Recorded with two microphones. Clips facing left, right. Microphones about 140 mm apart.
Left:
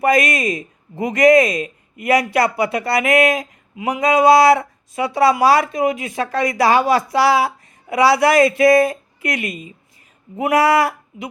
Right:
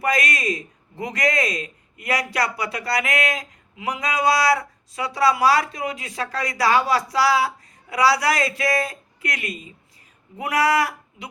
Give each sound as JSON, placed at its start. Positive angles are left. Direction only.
{"t": 0.0, "sound": "speech", "side_deg": 25}